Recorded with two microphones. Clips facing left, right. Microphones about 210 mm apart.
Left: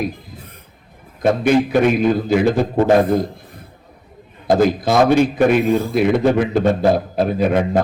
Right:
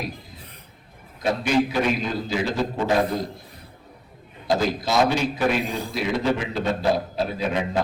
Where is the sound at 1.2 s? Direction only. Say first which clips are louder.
Left 7 dB; 55° left (ahead or behind).